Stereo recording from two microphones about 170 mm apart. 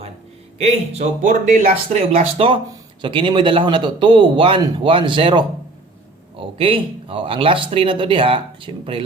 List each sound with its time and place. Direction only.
0.6 s a man's voice: 40° right (ahead or behind)